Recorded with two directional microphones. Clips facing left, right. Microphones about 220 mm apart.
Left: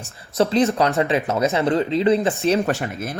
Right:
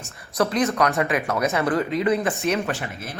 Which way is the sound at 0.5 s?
30° left (ahead or behind).